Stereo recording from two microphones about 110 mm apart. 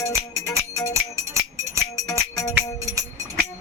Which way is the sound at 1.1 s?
25° right (ahead or behind).